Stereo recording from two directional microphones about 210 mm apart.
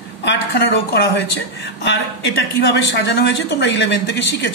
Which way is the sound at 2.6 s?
55° left (ahead or behind).